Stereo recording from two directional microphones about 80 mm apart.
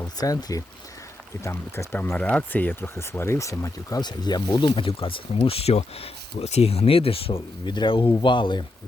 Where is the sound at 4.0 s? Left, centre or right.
Left.